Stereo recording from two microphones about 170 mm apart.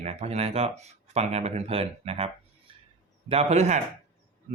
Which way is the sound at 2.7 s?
30° right (ahead or behind).